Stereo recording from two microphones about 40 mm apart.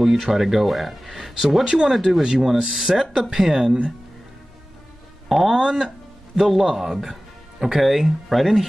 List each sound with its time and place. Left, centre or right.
0.0 s speech: centre
1.6 s speech: centre
1.9 s a man's voice: centre
5.3 s a man's voice: centre